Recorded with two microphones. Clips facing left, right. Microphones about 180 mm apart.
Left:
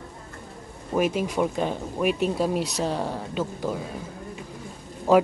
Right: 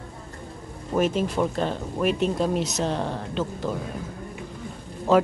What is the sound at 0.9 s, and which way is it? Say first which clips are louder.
Speech: right 1 dB; 10° left (ahead or behind).